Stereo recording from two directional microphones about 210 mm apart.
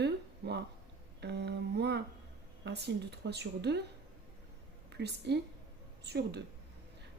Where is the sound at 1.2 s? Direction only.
55° right (ahead or behind).